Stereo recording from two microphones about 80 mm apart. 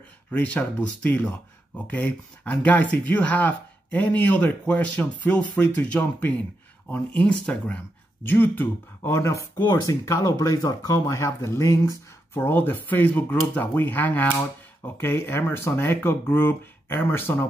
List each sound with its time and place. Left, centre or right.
0.3 s speech: centre; by 12.0 s left
12.4 s speech: left